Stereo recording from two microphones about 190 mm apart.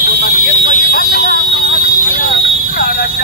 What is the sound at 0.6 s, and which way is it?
Vehicle, 50° left (ahead or behind).